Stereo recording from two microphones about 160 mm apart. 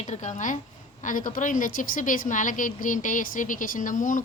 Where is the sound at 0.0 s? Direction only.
45° left (ahead or behind).